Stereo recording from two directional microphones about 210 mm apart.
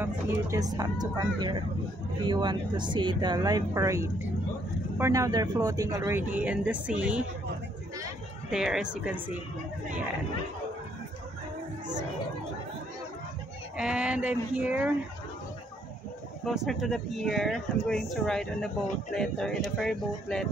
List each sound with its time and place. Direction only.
0.0 s speech: 15° right (ahead or behind)
8.5 s speech: centre (ahead or behind)
13.7 s speech: 5° right (ahead or behind)
16.4 s speech: centre (ahead or behind)